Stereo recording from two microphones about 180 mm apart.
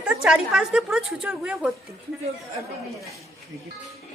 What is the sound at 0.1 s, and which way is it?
A woman's voice, 5° right (ahead or behind).